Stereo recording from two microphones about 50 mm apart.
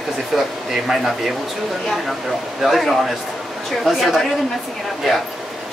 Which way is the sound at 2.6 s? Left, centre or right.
Centre.